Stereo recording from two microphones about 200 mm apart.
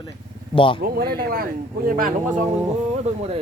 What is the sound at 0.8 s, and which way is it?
Speech, 50° right (ahead or behind).